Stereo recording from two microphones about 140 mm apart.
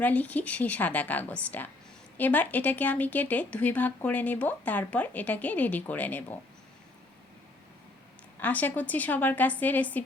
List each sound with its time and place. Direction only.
0.0 s speech: 10° left (ahead or behind)
8.4 s speech: 15° left (ahead or behind)